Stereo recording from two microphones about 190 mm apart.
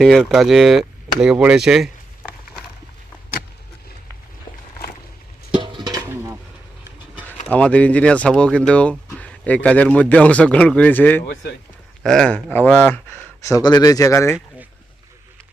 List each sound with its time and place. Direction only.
0.0 s speech: centre (ahead or behind)
5.5 s a sound: 25° right (ahead or behind)
7.4 s speech: 5° left (ahead or behind)